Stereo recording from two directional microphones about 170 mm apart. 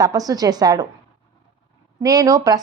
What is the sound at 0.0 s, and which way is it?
Speech, 20° right (ahead or behind).